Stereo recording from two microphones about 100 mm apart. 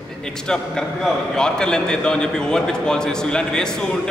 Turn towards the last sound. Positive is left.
turn(degrees=5)  # may be behind; listen again after turning